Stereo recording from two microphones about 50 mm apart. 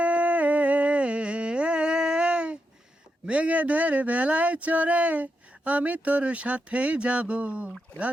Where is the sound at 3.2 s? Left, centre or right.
Right.